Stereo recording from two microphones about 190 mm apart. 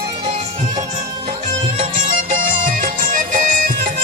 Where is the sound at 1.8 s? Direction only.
40° right (ahead or behind).